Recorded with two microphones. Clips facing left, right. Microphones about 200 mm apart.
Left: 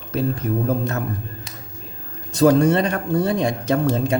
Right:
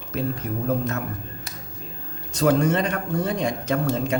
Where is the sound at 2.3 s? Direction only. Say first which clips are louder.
Left 5 dB; 35° left (ahead or behind).